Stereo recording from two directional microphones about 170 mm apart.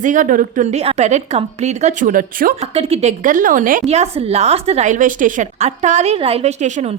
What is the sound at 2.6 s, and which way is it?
Speech, 35° right (ahead or behind).